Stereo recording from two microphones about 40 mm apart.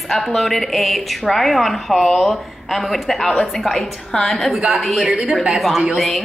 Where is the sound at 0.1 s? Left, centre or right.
Centre.